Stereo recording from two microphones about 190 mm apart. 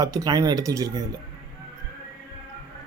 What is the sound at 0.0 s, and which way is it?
Speech, 20° right (ahead or behind).